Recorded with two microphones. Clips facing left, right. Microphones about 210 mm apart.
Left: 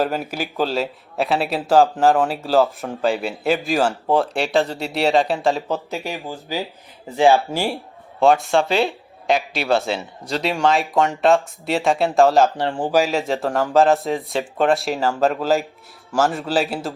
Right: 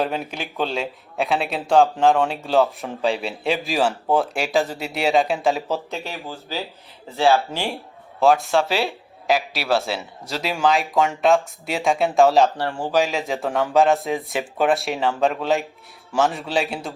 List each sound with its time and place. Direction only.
0.0 s speech: centre (ahead or behind)
6.1 s speech: 15° left (ahead or behind); by 12.5 s centre (ahead or behind)
12.5 s speech: 15° left (ahead or behind)
13.0 s speech: centre (ahead or behind)